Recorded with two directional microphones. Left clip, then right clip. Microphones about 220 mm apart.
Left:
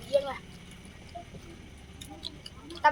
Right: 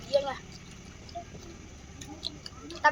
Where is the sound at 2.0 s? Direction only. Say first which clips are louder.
Right 3 dB; 5° left (ahead or behind).